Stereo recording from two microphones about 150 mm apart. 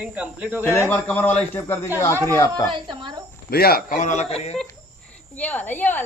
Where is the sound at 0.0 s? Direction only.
10° right (ahead or behind).